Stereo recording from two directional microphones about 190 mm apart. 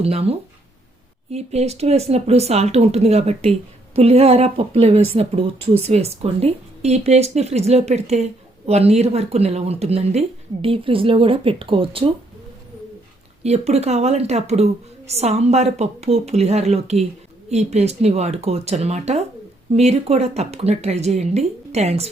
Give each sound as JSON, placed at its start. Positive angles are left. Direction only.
{"t": 0.0, "sound": "speech", "side_deg": -30}
{"t": 13.4, "sound": "speech", "side_deg": -35}